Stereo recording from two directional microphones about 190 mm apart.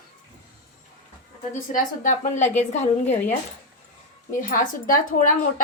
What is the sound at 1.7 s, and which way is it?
A woman's voice, 40° left (ahead or behind).